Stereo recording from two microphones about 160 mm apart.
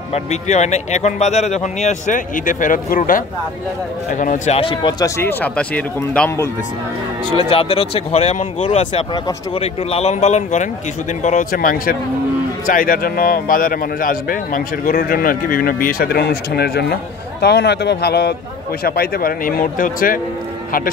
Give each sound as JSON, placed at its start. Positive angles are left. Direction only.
{"t": 0.1, "sound": "speech", "side_deg": 45}
{"t": 4.6, "sound": "speech", "side_deg": 35}
{"t": 5.0, "sound": "speech", "side_deg": 15}
{"t": 7.3, "sound": "a man's voice", "side_deg": 35}
{"t": 18.9, "sound": "speech", "side_deg": 70}